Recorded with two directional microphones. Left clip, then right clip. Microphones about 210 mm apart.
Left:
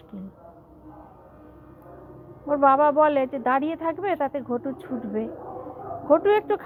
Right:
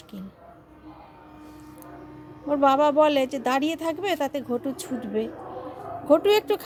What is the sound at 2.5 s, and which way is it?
Speech, 20° right (ahead or behind).